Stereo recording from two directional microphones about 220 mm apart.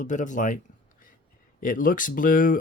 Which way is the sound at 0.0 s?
35° left (ahead or behind).